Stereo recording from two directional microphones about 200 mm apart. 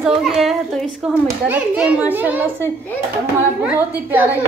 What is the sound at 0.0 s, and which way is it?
A child's voice, centre (ahead or behind).